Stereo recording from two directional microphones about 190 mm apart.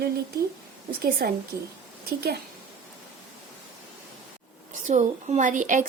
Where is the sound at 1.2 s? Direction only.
55° right (ahead or behind).